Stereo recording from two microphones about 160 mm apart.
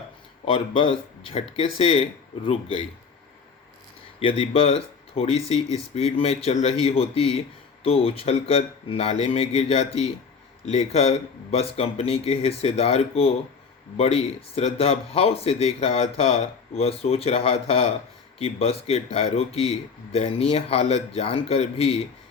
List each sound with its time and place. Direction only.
0.4 s speech: 35° left (ahead or behind)
4.2 s speech: 35° left (ahead or behind)